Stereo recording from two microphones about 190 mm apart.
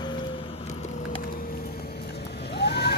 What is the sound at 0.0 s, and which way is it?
Wood, 25° left (ahead or behind).